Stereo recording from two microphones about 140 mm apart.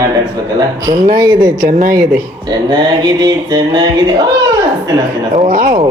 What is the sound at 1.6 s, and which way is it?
Speech, 85° right.